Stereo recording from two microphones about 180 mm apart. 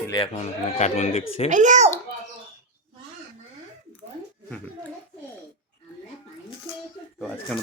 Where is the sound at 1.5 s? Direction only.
45° right (ahead or behind).